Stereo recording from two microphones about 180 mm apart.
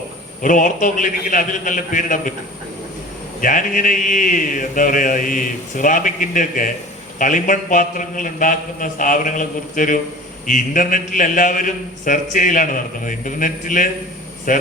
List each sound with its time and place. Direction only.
0.4 s a man's voice: 45° left (ahead or behind)
3.4 s a man's voice: 45° left (ahead or behind)